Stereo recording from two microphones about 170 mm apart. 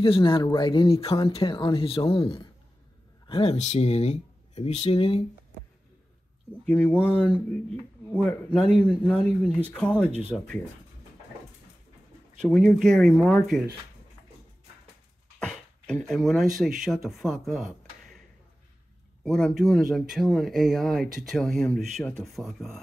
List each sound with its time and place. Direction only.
0.0 s speech: 30° left (ahead or behind)
6.6 s speech: 10° left (ahead or behind)
8.1 s speech: 10° left (ahead or behind)
12.4 s speech: 5° left (ahead or behind)
15.3 s a sound: 5° left (ahead or behind)
16.8 s speech: centre (ahead or behind)
19.2 s speech: centre (ahead or behind)